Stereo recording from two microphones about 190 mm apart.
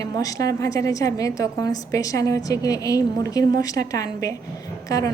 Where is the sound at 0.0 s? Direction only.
20° left (ahead or behind).